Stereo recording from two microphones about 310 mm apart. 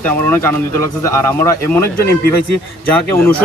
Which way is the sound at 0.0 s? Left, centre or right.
Centre.